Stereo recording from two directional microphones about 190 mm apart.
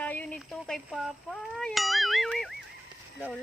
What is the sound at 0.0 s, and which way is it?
Clang, 5° left (ahead or behind).